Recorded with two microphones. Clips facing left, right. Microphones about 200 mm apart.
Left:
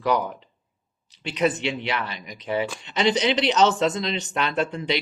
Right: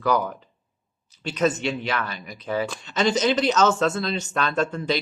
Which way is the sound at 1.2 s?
15° left (ahead or behind).